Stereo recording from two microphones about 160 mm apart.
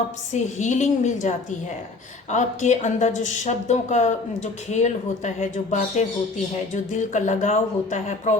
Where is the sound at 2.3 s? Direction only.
50° left (ahead or behind).